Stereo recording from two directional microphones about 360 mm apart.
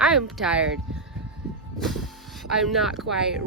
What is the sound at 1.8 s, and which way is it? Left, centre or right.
Vehicle, centre.